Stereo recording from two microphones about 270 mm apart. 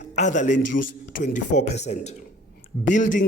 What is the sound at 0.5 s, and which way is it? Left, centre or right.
Speech, left.